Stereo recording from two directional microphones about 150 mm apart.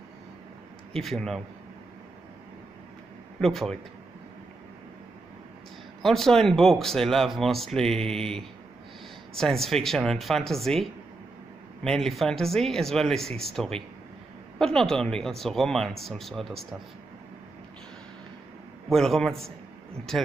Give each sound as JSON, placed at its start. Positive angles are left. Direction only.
{"t": 0.9, "sound": "speech", "side_deg": 5}
{"t": 3.3, "sound": "speech", "side_deg": 0}
{"t": 6.0, "sound": "speech", "side_deg": 0}
{"t": 18.9, "sound": "speech", "side_deg": 5}